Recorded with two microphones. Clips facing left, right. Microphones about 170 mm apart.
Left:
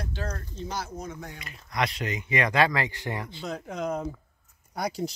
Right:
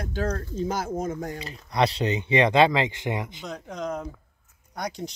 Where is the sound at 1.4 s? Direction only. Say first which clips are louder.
Right 5 dB; 30° right (ahead or behind).